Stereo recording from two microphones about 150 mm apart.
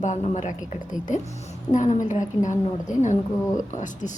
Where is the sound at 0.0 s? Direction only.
50° left (ahead or behind).